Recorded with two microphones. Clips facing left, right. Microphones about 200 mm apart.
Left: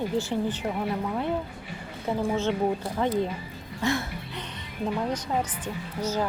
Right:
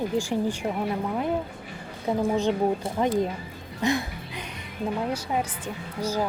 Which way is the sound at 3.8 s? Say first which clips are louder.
Right 2 dB; 15° right (ahead or behind).